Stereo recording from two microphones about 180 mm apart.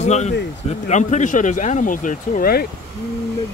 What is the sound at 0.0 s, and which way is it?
Speech, 40° left (ahead or behind).